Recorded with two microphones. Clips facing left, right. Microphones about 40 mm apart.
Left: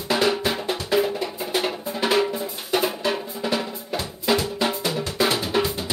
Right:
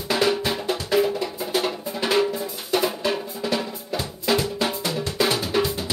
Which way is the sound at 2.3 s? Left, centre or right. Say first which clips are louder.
Even; centre.